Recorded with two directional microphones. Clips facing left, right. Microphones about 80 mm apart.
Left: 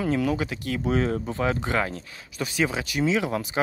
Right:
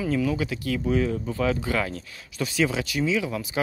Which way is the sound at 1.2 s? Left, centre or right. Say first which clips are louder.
Right 1 dB; left.